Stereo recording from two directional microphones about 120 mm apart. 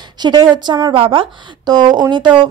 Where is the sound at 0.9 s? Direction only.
45° right (ahead or behind).